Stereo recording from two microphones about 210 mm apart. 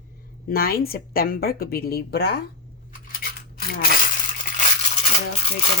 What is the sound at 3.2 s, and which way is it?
Cutlery, 45° left (ahead or behind).